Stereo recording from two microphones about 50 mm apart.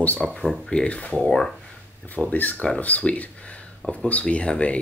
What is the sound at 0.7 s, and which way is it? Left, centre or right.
Speech, centre.